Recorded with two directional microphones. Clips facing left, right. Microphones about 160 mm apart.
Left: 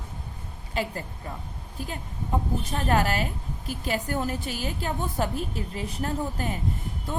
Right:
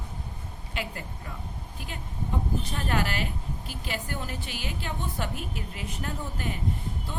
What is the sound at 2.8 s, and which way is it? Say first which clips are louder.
A woman's voice: left 6 dB; 40° left (ahead or behind).